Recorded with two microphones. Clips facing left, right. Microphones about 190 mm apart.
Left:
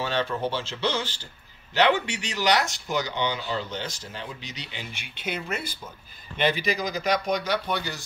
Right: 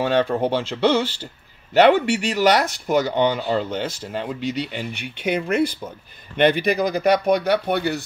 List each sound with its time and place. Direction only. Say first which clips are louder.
0.0 s speech: right 8 dB; 55° right (ahead or behind)